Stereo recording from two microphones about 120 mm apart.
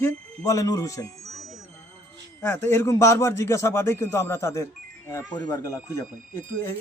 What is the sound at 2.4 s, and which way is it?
Speech, 20° left (ahead or behind).